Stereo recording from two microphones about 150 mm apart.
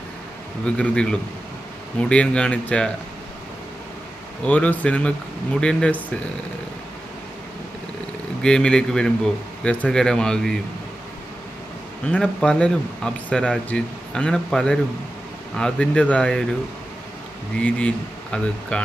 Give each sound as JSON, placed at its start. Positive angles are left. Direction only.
{"t": 0.7, "sound": "speech", "side_deg": 5}
{"t": 4.5, "sound": "speech", "side_deg": 10}
{"t": 8.4, "sound": "speech", "side_deg": 5}
{"t": 12.1, "sound": "speech", "side_deg": 5}
{"t": 17.6, "sound": "speech", "side_deg": 5}